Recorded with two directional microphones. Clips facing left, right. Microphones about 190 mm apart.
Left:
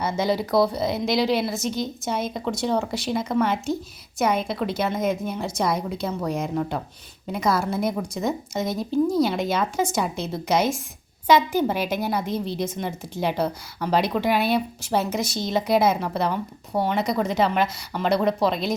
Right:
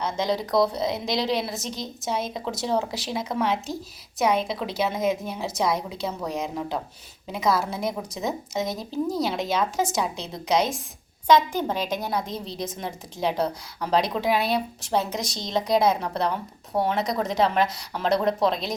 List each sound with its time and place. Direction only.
0.0 s a woman's voice: 5° left (ahead or behind)